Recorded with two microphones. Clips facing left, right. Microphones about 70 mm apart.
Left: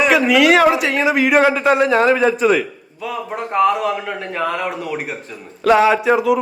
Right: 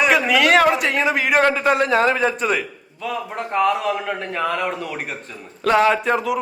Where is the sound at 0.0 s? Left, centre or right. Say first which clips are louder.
Left 3 dB; centre.